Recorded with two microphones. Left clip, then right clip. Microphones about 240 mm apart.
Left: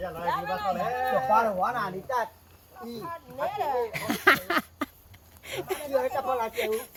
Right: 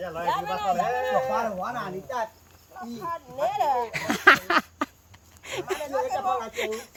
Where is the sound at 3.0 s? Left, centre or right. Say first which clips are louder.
Right 5 dB; right.